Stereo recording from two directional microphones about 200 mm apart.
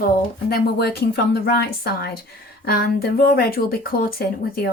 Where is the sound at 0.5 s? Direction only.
50° left (ahead or behind).